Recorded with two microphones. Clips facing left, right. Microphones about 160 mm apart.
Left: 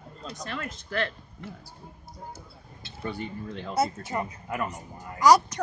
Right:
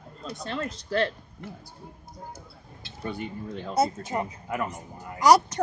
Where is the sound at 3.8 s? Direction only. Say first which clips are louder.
Right 2 dB; 20° right (ahead or behind).